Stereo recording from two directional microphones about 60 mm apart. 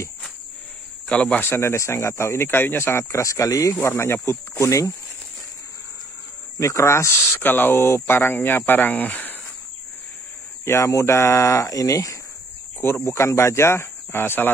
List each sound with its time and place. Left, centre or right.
1.0 s a man's voice: centre
1.4 s speech: left
3.8 s speech: left
6.6 s speech: left
7.4 s speech: left
10.6 s speech: left
13.0 s speech: left